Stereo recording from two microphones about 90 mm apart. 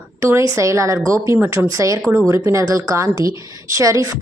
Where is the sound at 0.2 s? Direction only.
30° right (ahead or behind).